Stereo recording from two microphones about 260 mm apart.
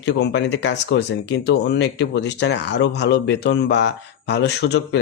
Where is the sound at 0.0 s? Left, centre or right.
Left.